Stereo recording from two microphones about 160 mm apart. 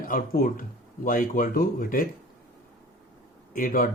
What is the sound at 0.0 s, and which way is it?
Speech, 60° left (ahead or behind).